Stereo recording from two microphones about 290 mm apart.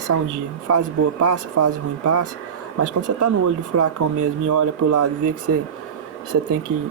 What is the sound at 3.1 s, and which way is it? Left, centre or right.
Speech, right.